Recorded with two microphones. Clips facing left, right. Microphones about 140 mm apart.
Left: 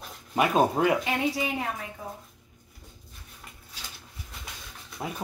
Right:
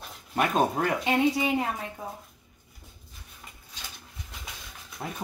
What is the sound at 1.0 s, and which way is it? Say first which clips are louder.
Speech: right 4 dB; 25° right (ahead or behind).